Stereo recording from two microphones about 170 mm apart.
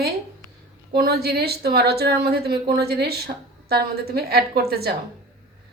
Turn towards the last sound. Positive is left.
turn(degrees=-65)  # may be behind; listen again after turning